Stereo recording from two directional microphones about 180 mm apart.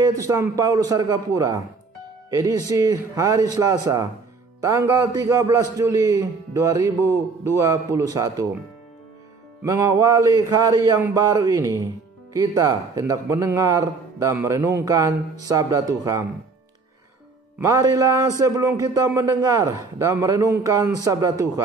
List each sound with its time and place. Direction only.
0.2 s a man's voice: 20° right (ahead or behind)
2.7 s a man's voice: 20° right (ahead or behind)
9.6 s a man's voice: 15° right (ahead or behind)
17.6 s a man's voice: 20° right (ahead or behind)